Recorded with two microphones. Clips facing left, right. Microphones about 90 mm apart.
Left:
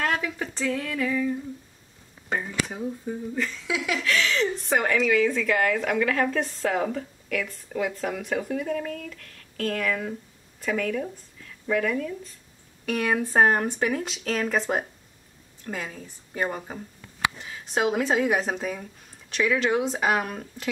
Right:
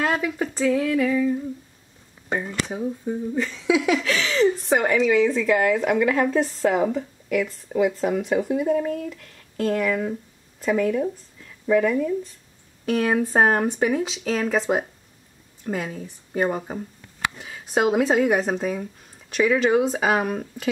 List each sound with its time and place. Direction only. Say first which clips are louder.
0.0 s a woman's voice: right 4 dB; 5° right (ahead or behind)
3.6 s speech: right 9 dB; 25° right (ahead or behind)
4.1 s a woman's voice: right 1 dB; 5° right (ahead or behind)
8.6 s speech: right 7 dB; 25° right (ahead or behind)
12.8 s speech: right 4 dB; centre (ahead or behind)